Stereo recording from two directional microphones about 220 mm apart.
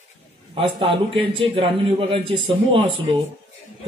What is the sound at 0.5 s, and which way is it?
A man's voice, 25° right (ahead or behind).